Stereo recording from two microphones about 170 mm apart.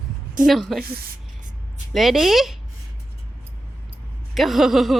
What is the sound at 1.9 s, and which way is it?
Speech, centre (ahead or behind).